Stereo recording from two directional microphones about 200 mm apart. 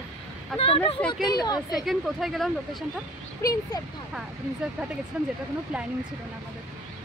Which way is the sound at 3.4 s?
15° left (ahead or behind).